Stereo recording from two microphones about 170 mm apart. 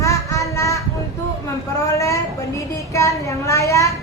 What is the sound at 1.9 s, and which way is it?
Speech, 15° left (ahead or behind).